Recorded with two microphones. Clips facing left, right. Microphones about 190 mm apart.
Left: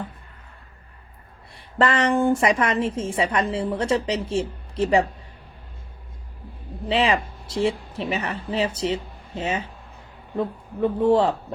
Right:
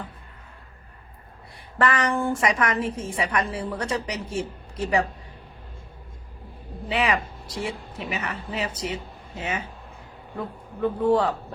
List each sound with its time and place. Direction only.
1.8 s a woman's voice: 25° left (ahead or behind)
6.8 s a woman's voice: 25° left (ahead or behind)